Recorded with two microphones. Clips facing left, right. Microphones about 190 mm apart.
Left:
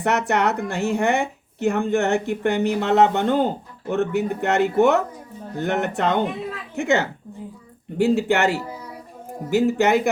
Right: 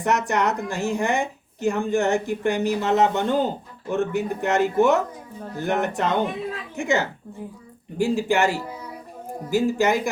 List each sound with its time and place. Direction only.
0.0 s a woman's voice: 65° left (ahead or behind)